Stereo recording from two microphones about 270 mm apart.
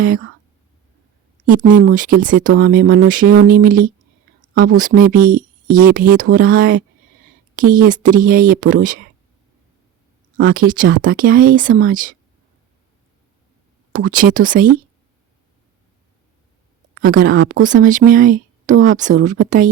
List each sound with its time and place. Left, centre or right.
0.0 s speech: right
1.5 s speech: right
10.3 s speech: right
13.9 s speech: right
17.0 s speech: right